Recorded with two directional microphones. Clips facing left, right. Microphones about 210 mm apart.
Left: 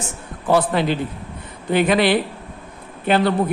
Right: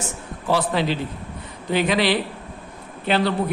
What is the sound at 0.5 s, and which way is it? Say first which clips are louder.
Speech: left 3 dB; 55° left (ahead or behind).